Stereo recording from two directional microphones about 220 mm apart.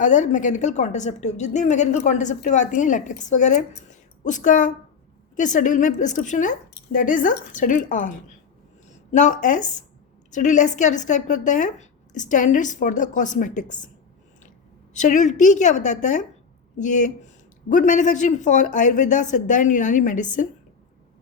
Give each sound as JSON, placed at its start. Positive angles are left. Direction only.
{"t": 0.0, "sound": "a man's voice", "side_deg": 35}
{"t": 14.9, "sound": "a man's voice", "side_deg": 35}